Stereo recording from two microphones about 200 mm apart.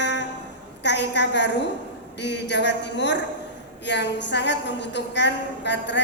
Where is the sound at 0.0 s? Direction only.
60° left (ahead or behind).